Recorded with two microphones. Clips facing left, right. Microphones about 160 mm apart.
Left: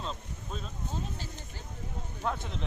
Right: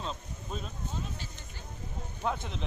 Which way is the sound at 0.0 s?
Centre (ahead or behind).